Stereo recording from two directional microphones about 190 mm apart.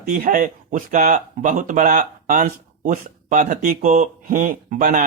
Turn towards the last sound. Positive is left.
turn(degrees=-45)  # may be behind; listen again after turning